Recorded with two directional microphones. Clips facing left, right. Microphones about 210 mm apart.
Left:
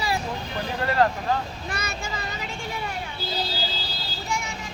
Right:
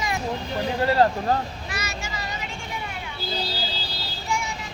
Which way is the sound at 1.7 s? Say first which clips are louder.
Left 1 dB; 55° left (ahead or behind).